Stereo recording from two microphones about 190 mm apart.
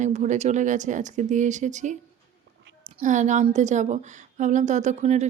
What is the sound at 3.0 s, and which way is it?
Speech, 40° right (ahead or behind).